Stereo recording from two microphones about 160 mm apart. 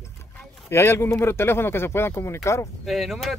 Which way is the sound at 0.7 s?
15° left (ahead or behind).